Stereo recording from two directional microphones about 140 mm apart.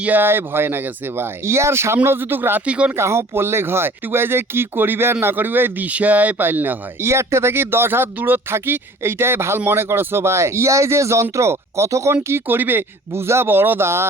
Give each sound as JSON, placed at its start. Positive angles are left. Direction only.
{"t": 0.0, "sound": "speech", "side_deg": -15}